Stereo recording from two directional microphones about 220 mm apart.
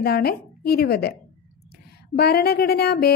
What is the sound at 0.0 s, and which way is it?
Mantra, 45° left (ahead or behind).